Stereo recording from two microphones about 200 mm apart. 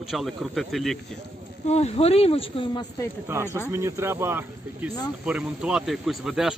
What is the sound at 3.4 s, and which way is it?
Speech, 10° left (ahead or behind).